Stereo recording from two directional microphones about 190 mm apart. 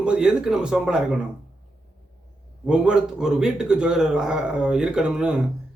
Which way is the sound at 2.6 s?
5° right (ahead or behind).